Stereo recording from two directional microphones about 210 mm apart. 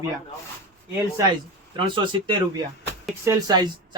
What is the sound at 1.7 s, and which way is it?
Speech, 25° right (ahead or behind).